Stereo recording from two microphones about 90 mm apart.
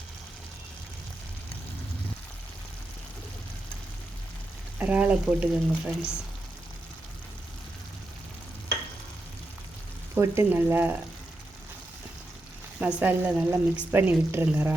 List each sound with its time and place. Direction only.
4.8 s speech: 15° right (ahead or behind)
10.2 s speech: 30° right (ahead or behind)
12.8 s speech: 15° right (ahead or behind)
13.9 s speech: 25° right (ahead or behind)